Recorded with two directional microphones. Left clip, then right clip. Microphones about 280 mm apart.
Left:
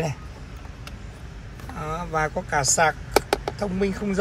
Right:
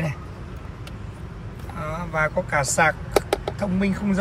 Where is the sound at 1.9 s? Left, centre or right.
Centre.